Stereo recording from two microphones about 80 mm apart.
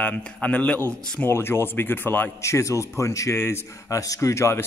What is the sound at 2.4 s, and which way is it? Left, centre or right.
A man's voice, left.